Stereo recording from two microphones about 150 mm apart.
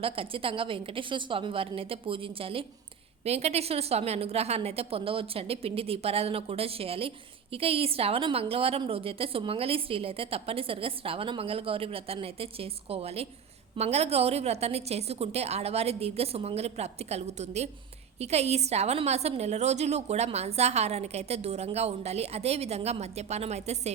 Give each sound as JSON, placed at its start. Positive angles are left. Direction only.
{"t": 0.0, "sound": "a woman's voice", "side_deg": -40}